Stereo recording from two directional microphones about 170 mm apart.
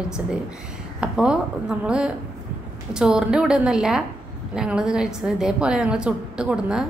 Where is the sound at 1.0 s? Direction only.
5° right (ahead or behind).